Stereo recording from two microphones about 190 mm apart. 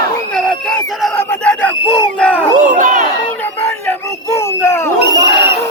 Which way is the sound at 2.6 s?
45° right (ahead or behind).